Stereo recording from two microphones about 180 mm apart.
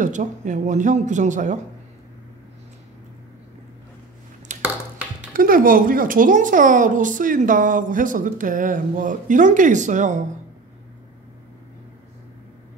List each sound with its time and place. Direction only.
0.0 s speech: 45° right (ahead or behind)
4.5 s a sound: 45° right (ahead or behind)
5.3 s speech: 50° right (ahead or behind)